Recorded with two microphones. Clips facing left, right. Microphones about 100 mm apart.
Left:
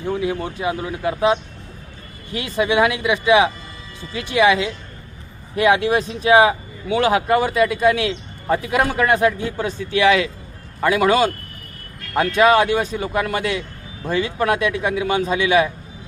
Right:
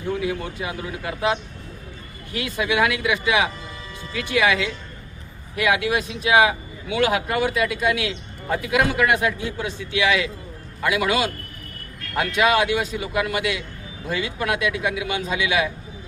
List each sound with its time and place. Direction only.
0.0 s speech: 30° left (ahead or behind)